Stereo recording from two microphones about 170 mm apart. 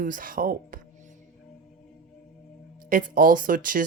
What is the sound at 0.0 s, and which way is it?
Speech, 55° right (ahead or behind).